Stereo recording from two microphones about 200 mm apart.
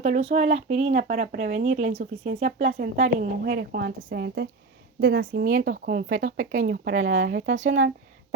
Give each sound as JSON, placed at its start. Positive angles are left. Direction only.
{"t": 0.0, "sound": "speech", "side_deg": -30}
{"t": 1.0, "sound": "speech", "side_deg": -45}
{"t": 2.7, "sound": "a woman's voice", "side_deg": -45}
{"t": 6.2, "sound": "speech", "side_deg": -60}